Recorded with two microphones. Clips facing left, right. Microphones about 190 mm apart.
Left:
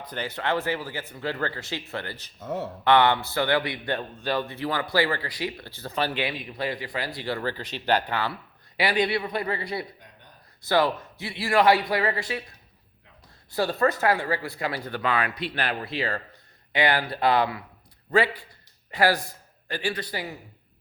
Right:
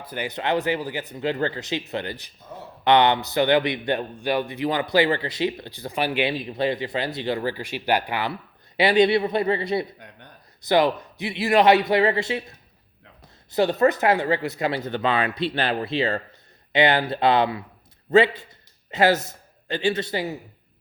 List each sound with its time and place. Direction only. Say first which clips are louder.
0.0 s speech: right 2 dB; 10° right (ahead or behind)
2.4 s speech: left 10 dB; 75° left (ahead or behind)
2.8 s speech: right 2 dB; 20° right (ahead or behind)
6.2 s speech: right 6 dB; 30° right (ahead or behind)
10.0 s a sound: right 6 dB; 65° right (ahead or behind)
10.6 s a man's voice: right 3 dB; 20° right (ahead or behind)